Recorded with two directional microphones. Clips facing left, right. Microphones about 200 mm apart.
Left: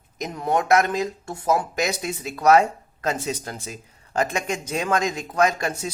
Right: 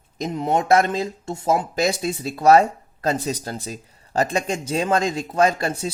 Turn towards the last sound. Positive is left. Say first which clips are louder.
# right 2 dB
turn(degrees=-30)  # may be behind; listen again after turning